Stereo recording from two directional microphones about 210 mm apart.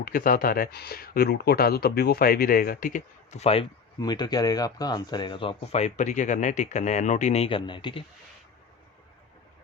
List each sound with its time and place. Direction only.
0.0 s speech: 45° left (ahead or behind); by 8.0 s 25° left (ahead or behind)